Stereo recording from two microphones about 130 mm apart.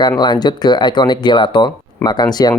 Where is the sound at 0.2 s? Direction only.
35° left (ahead or behind).